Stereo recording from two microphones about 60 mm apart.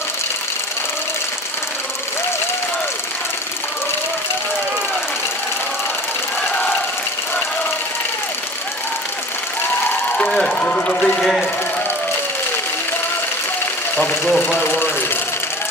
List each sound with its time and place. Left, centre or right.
10.1 s ratchet: centre
13.9 s a sound: left
14.4 s speech: left